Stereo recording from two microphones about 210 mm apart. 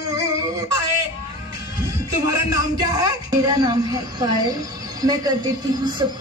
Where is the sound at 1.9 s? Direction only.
15° right (ahead or behind).